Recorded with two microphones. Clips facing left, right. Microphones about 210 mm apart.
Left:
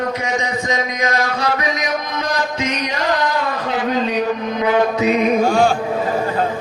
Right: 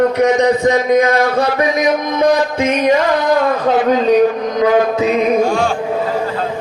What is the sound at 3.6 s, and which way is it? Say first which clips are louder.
Speech: right 7 dB; 45° right (ahead or behind).